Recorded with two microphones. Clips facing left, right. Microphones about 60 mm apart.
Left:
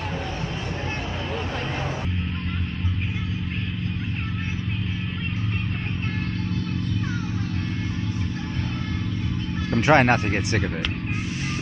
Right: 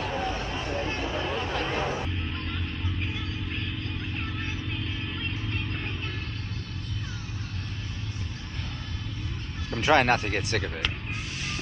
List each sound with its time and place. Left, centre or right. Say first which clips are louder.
9.9 s speech: left 2 dB; left